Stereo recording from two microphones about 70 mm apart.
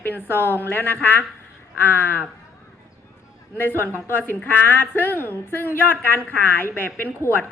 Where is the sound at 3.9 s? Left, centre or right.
Right.